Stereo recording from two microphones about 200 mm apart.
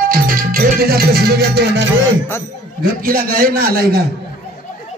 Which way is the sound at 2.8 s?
45° right (ahead or behind).